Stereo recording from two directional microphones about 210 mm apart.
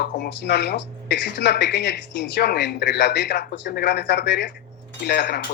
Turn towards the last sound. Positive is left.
turn(degrees=50)  # may be behind; listen again after turning